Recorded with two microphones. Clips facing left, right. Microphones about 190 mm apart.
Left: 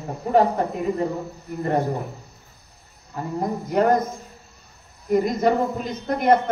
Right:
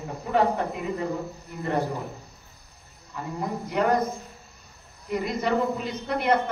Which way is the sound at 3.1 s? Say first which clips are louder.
Left 5 dB; 40° left (ahead or behind).